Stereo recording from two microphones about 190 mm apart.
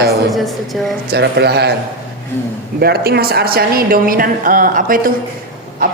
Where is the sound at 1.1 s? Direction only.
60° right (ahead or behind).